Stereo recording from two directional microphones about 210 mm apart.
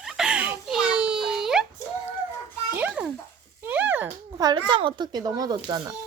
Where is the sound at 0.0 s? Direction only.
Centre (ahead or behind).